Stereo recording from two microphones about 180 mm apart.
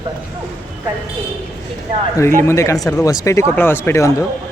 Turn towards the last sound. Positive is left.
turn(degrees=15)  # may be behind; listen again after turning